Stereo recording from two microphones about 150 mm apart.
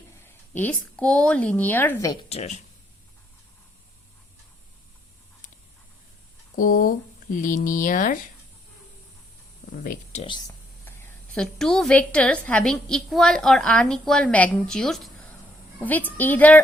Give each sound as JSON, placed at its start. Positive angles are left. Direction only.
{"t": 0.3, "sound": "speech", "side_deg": 10}
{"t": 2.3, "sound": "speech", "side_deg": 45}
{"t": 6.6, "sound": "speech", "side_deg": 70}
{"t": 9.7, "sound": "speech", "side_deg": 65}
{"t": 10.2, "sound": "speech", "side_deg": 30}
{"t": 11.3, "sound": "a woman's voice", "side_deg": 5}